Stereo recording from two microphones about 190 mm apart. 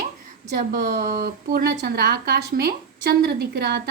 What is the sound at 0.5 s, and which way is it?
A woman's voice, 50° right (ahead or behind).